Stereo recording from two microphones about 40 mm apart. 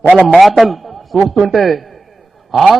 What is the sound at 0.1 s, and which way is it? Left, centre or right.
Speech, right.